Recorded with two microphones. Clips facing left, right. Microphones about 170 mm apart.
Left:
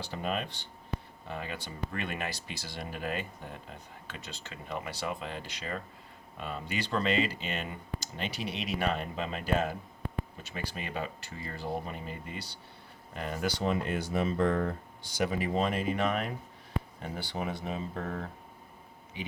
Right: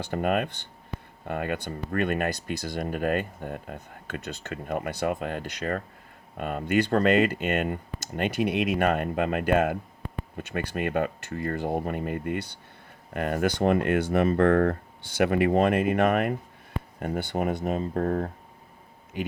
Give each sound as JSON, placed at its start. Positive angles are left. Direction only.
{"t": 0.0, "sound": "speech", "side_deg": -55}